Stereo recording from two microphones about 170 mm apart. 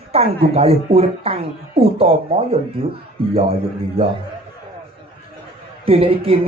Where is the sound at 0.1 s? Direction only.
35° right (ahead or behind).